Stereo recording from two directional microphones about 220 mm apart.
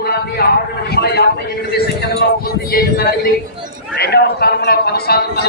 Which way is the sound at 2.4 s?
45° left (ahead or behind).